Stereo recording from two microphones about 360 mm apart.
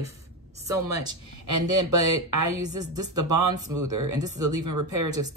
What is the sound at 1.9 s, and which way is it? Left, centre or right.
Speech, centre.